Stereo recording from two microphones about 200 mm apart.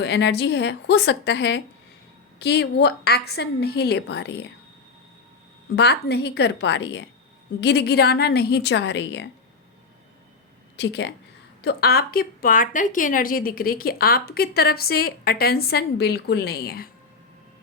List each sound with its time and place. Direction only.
0.0 s a woman's voice: 60° left (ahead or behind)
5.7 s a woman's voice: 55° left (ahead or behind)
7.6 s a woman's voice: 55° left (ahead or behind)
10.8 s a woman's voice: 60° left (ahead or behind)
11.6 s a woman's voice: 50° left (ahead or behind)